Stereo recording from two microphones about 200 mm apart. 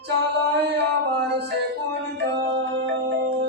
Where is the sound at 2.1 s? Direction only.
60° right (ahead or behind).